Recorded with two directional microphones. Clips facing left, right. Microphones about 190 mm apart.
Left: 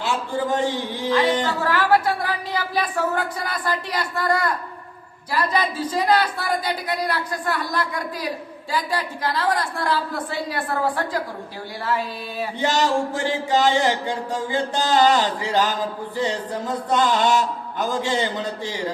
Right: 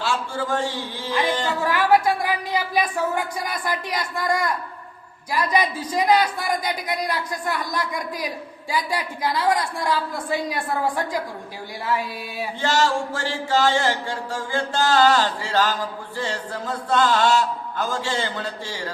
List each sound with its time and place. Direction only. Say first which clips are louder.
0.0 s a man's voice: left 2 dB; 20° left (ahead or behind)
1.6 s speech: right 2 dB; 15° right (ahead or behind)
12.6 s speech: left 1 dB; 20° left (ahead or behind)